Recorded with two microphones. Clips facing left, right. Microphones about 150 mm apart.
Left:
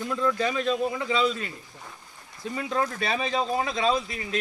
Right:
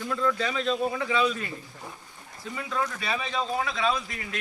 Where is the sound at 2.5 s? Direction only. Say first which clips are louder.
Left 3 dB; 35° left (ahead or behind).